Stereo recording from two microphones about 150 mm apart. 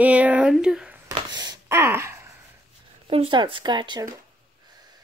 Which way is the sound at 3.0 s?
40° right (ahead or behind).